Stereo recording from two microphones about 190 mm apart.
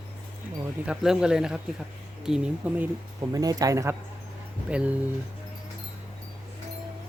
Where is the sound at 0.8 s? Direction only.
5° right (ahead or behind).